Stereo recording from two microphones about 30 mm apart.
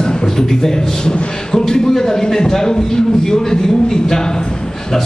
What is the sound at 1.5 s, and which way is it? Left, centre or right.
A man's voice, centre.